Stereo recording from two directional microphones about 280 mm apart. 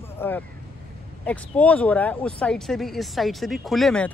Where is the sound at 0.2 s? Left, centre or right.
Centre.